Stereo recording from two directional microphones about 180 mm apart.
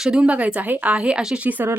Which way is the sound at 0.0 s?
5° right (ahead or behind).